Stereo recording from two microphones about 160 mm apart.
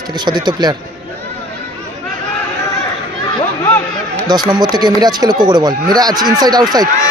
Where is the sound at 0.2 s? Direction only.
30° right (ahead or behind).